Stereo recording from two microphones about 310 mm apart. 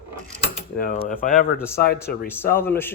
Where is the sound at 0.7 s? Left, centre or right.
Left.